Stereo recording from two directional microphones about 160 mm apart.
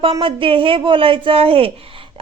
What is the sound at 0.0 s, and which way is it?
Speech, 35° right (ahead or behind).